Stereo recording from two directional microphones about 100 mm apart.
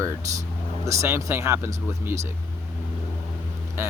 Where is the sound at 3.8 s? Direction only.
25° right (ahead or behind).